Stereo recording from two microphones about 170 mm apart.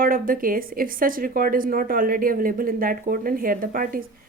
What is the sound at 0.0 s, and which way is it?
Speech, 55° right (ahead or behind).